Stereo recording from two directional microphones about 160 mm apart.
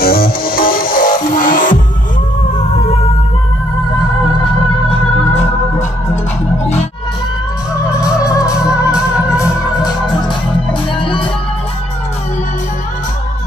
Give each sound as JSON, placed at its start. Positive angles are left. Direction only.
{"t": 0.0, "sound": "music", "side_deg": 70}
{"t": 8.0, "sound": "organ", "side_deg": 20}
{"t": 8.5, "sound": "music", "side_deg": -5}
{"t": 10.2, "sound": "music", "side_deg": 30}